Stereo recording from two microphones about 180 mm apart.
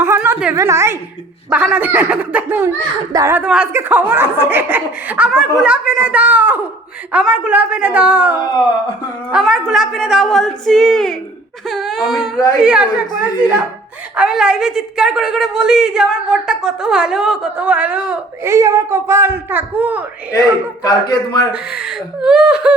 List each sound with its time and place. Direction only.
0.0 s a sound: 10° right (ahead or behind)
0.5 s speech: 15° right (ahead or behind)
8.4 s speech: 25° left (ahead or behind)
9.3 s a woman's voice: 5° right (ahead or behind)
20.8 s speech: 25° left (ahead or behind)
21.5 s a woman's voice: 5° right (ahead or behind)